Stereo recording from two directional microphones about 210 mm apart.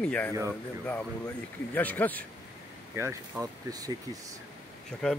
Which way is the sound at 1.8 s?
10° left (ahead or behind).